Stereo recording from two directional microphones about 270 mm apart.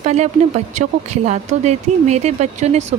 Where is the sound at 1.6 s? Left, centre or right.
Right.